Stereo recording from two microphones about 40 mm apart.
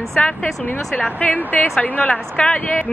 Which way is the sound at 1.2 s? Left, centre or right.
Left.